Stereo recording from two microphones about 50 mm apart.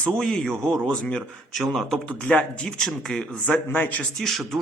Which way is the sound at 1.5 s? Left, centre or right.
Centre.